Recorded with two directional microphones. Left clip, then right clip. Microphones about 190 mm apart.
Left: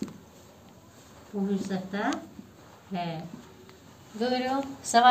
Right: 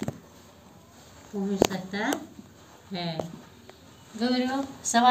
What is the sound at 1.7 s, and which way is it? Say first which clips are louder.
Speech: even; 30° left (ahead or behind).